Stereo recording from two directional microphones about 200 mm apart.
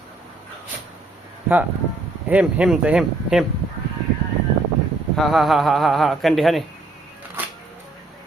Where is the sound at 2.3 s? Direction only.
5° right (ahead or behind).